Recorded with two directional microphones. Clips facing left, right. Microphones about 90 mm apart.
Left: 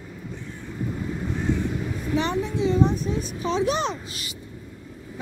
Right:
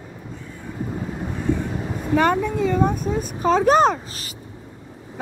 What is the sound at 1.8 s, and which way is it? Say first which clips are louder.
A child's voice: right 11 dB; 45° right (ahead or behind).